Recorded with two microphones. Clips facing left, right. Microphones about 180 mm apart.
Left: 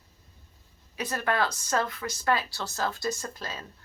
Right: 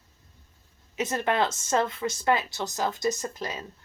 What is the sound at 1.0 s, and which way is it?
A woman's voice, 20° right (ahead or behind).